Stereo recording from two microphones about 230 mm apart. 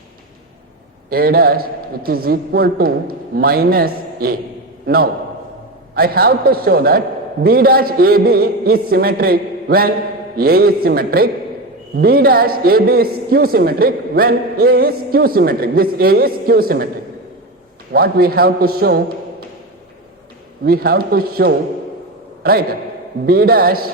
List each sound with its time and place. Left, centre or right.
1.1 s a man's voice: right
17.9 s a man's voice: right
20.7 s a man's voice: right
23.2 s a man's voice: right